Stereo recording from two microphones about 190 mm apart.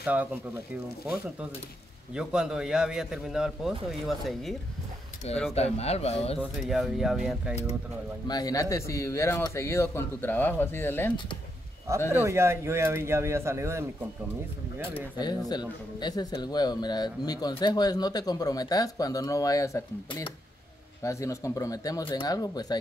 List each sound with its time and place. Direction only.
0.0 s speech: 5° right (ahead or behind)
2.1 s a man's voice: 5° right (ahead or behind)
5.5 s speech: 35° left (ahead or behind)
6.7 s a man's voice: centre (ahead or behind)
8.3 s a man's voice: 20° left (ahead or behind)
12.1 s speech: 15° right (ahead or behind)
15.1 s speech: 20° left (ahead or behind)